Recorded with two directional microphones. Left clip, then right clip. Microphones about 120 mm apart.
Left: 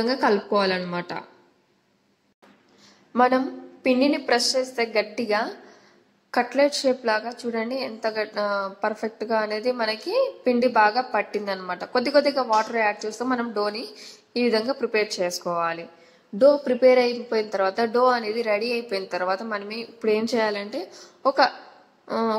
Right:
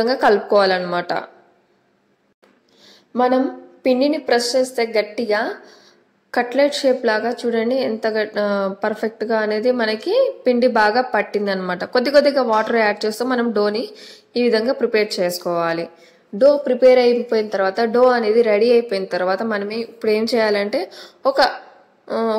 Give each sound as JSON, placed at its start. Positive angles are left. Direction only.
{"t": 0.0, "sound": "a woman's voice", "side_deg": -35}
{"t": 3.8, "sound": "a woman's voice", "side_deg": -30}
{"t": 20.2, "sound": "a woman's voice", "side_deg": -15}
{"t": 20.8, "sound": "a woman's voice", "side_deg": -40}